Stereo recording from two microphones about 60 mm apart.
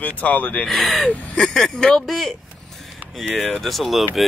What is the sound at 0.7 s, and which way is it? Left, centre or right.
Speech, centre.